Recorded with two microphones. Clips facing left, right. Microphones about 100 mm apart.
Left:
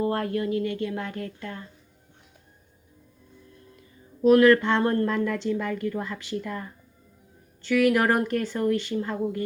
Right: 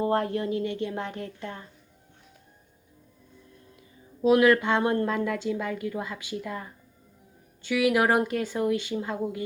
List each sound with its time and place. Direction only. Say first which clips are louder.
0.0 s a woman's voice: even; 25° right (ahead or behind)
4.2 s a woman's voice: left 3 dB; 15° right (ahead or behind)